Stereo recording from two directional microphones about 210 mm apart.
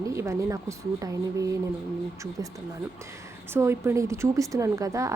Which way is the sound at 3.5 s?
10° right (ahead or behind).